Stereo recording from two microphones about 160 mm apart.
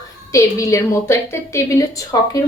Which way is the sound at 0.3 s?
20° left (ahead or behind).